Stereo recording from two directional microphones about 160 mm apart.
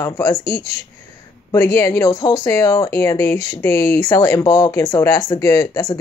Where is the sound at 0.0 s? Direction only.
20° left (ahead or behind).